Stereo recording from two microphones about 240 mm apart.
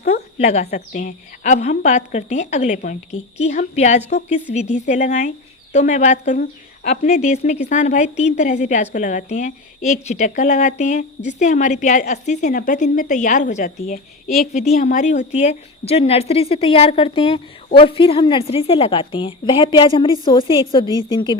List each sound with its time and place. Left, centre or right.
0.0 s a woman's voice: left